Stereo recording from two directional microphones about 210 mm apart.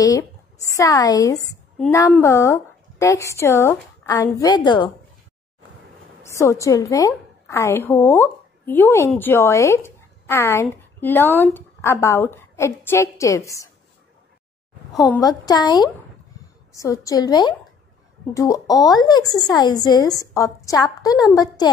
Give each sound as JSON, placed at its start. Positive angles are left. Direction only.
{"t": 0.0, "sound": "a woman's voice", "side_deg": 15}
{"t": 6.2, "sound": "a woman's voice", "side_deg": 15}
{"t": 15.0, "sound": "a woman's voice", "side_deg": 20}